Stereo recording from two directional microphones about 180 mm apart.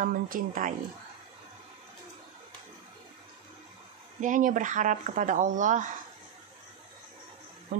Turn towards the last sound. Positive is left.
turn(degrees=-40)  # may be behind; listen again after turning